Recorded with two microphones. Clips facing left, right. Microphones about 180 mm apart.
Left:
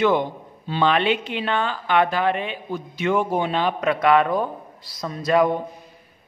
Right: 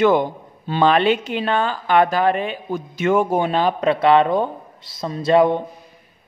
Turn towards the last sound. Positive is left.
turn(degrees=-25)  # may be behind; listen again after turning